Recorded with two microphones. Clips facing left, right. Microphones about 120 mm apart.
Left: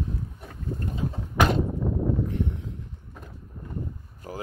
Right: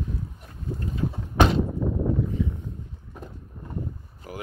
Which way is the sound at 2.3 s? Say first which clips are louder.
Right 1 dB; 75° left (ahead or behind).